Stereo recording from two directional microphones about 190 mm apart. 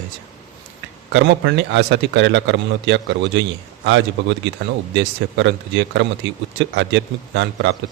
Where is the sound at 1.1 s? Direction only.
70° right (ahead or behind).